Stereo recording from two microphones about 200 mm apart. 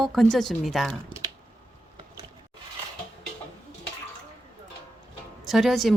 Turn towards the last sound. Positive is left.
turn(degrees=0)  # may be behind; listen again after turning